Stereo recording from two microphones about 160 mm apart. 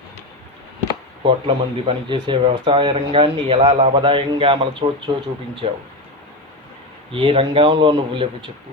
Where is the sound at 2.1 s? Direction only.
30° right (ahead or behind).